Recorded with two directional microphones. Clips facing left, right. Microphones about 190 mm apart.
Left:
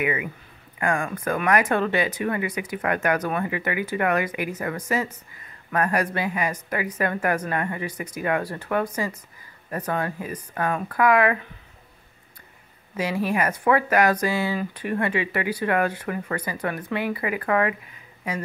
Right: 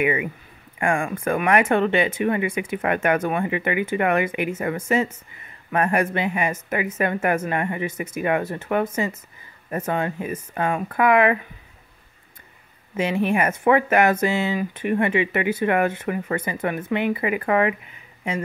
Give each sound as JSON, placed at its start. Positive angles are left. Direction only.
{"t": 0.0, "sound": "speech", "side_deg": -25}
{"t": 12.9, "sound": "speech", "side_deg": -25}